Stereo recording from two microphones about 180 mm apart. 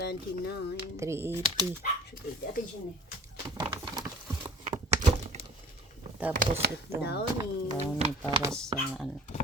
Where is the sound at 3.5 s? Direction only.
25° right (ahead or behind).